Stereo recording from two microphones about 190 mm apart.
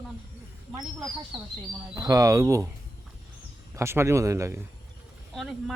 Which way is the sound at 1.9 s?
20° right (ahead or behind).